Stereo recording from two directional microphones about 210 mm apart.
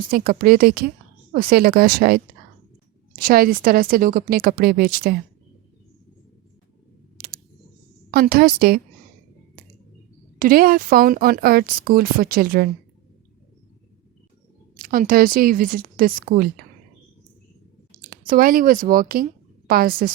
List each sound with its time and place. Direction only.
0.1 s speech: 45° right (ahead or behind)
8.1 s speech: 45° right (ahead or behind)
10.3 s speech: 40° right (ahead or behind)
14.8 s speech: 40° right (ahead or behind)
18.1 s a woman's voice: 45° right (ahead or behind)